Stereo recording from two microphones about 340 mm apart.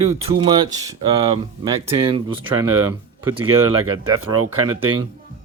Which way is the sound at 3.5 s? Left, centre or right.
Right.